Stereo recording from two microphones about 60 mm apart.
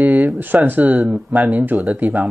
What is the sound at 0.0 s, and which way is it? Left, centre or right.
Speech, right.